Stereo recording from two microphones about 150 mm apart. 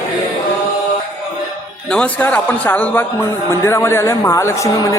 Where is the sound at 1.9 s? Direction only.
10° left (ahead or behind).